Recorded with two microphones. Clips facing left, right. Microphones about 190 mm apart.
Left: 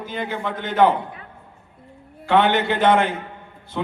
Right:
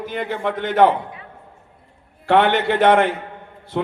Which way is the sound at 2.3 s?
65° right (ahead or behind).